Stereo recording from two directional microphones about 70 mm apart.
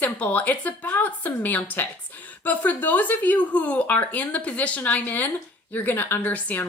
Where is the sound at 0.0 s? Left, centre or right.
Left.